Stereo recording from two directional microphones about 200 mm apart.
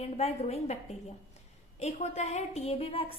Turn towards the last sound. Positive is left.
turn(degrees=30)  # may be behind; listen again after turning